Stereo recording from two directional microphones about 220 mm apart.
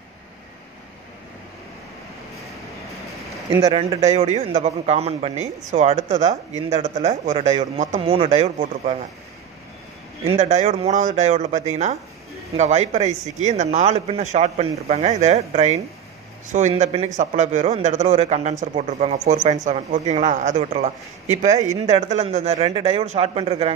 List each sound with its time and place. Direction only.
3.6 s a man's voice: 30° right (ahead or behind)
10.2 s speech: 30° right (ahead or behind)